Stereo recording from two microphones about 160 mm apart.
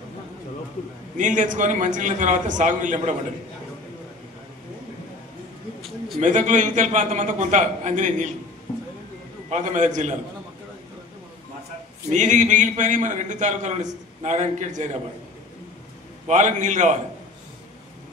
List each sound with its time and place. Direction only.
1.1 s a man's voice: 50° right (ahead or behind)
5.8 s a sound: centre (ahead or behind)
6.2 s a man's voice: 50° right (ahead or behind)
9.5 s a man's voice: 50° right (ahead or behind)
12.1 s a man's voice: 50° right (ahead or behind)
16.3 s a man's voice: 50° right (ahead or behind)